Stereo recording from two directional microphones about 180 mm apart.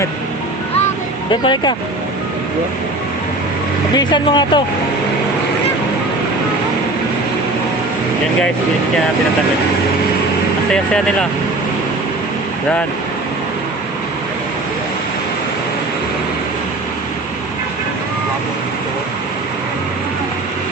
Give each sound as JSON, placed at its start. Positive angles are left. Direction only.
{"t": 1.3, "sound": "speech", "side_deg": 25}
{"t": 3.9, "sound": "speech", "side_deg": 25}
{"t": 10.7, "sound": "speech", "side_deg": 5}